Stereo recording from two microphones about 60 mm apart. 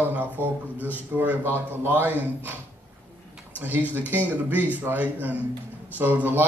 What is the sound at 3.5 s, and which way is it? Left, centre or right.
A man's voice, right.